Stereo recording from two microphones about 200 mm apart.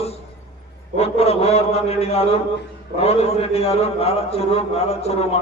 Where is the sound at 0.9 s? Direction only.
30° left (ahead or behind).